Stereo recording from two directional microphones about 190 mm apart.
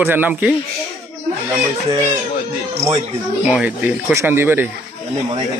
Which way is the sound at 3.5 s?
5° right (ahead or behind).